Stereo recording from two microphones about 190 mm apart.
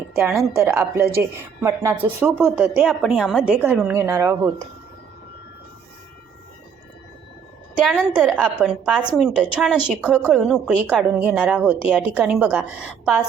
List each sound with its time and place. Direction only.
0.6 s speech: 10° right (ahead or behind)
7.9 s a woman's voice: 5° right (ahead or behind)